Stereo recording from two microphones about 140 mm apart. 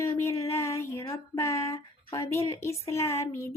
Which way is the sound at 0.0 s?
20° left (ahead or behind).